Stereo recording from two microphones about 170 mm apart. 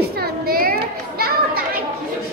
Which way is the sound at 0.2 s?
60° right (ahead or behind).